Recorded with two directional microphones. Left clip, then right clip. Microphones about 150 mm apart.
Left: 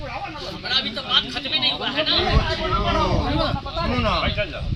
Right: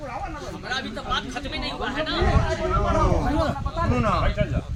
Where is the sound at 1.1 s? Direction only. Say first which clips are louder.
Left 8 dB; 10° left (ahead or behind).